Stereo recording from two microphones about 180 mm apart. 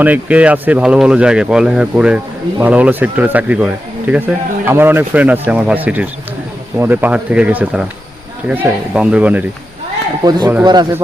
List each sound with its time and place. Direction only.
0.0 s speech: 10° right (ahead or behind)
10.2 s speech: 25° right (ahead or behind)